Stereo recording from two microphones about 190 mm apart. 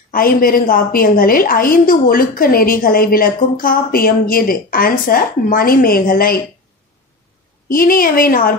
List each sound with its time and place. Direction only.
0.1 s a woman's voice: 50° left (ahead or behind)
7.6 s a woman's voice: 50° left (ahead or behind)